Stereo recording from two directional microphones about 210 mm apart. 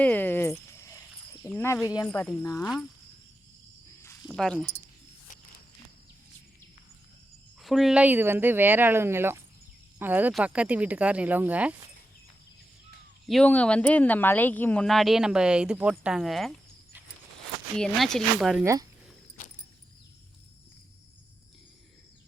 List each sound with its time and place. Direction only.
0.0 s speech: 10° left (ahead or behind)
0.8 s cricket: 15° left (ahead or behind)
1.5 s speech: 10° left (ahead or behind)
2.0 s speech: centre (ahead or behind)
2.4 s speech: 15° left (ahead or behind)
4.0 s cricket: 15° left (ahead or behind)
4.3 s speech: 5° left (ahead or behind)
7.6 s speech: centre (ahead or behind)
13.2 s speech: 5° left (ahead or behind)
18.6 s speech: 15° right (ahead or behind)